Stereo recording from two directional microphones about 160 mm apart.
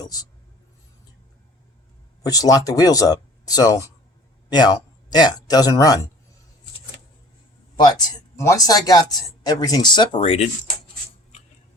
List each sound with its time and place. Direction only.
0.0 s a sound: 25° left (ahead or behind)
2.2 s speech: 20° left (ahead or behind)
7.8 s speech: 25° left (ahead or behind)